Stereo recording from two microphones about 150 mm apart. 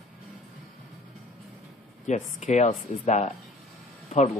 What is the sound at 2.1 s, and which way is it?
Speech, 50° left (ahead or behind).